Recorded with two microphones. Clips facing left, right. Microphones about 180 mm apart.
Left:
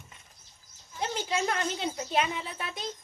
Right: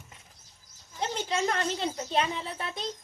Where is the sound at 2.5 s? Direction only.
25° right (ahead or behind).